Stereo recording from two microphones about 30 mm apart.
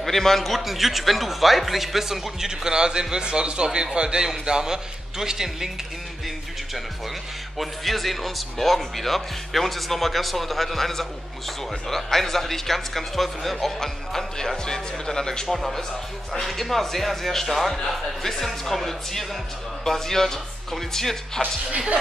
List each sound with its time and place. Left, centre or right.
0.0 s speech: centre
7.5 s speech: centre
15.4 s speech: centre
21.4 s speech: left